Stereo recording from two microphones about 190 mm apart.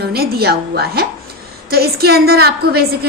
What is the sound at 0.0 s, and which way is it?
A woman's voice, 55° right (ahead or behind).